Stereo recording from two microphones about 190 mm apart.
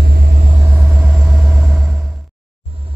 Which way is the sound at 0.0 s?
55° right (ahead or behind).